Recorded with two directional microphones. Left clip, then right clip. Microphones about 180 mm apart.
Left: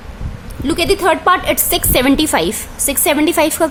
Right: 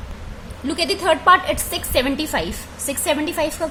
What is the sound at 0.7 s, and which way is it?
A woman's voice, 30° left (ahead or behind).